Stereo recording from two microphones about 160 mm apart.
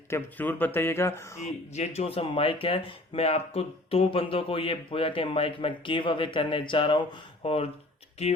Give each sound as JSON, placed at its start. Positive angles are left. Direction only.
{"t": 0.1, "sound": "speech", "side_deg": 10}
{"t": 1.7, "sound": "speech", "side_deg": 45}